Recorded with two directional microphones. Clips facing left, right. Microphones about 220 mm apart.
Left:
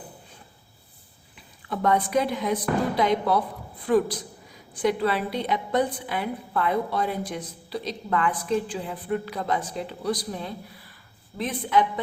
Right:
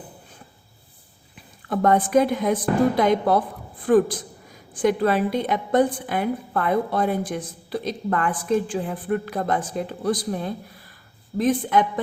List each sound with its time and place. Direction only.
1.7 s a woman's voice: 50° right (ahead or behind)